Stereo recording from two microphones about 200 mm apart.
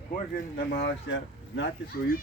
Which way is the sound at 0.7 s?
50° left (ahead or behind).